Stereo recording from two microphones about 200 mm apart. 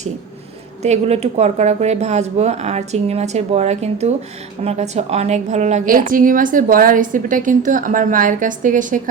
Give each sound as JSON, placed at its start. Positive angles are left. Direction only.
{"t": 0.8, "sound": "a woman's voice", "side_deg": -35}